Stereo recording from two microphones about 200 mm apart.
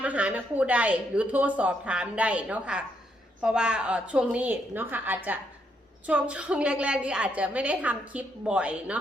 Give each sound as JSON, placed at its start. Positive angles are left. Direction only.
{"t": 0.0, "sound": "a woman's voice", "side_deg": -5}